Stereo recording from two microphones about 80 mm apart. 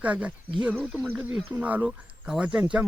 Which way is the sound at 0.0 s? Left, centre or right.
Centre.